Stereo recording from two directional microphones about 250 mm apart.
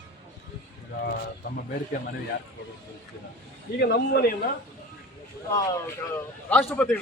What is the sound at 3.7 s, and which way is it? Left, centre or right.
Speech, left.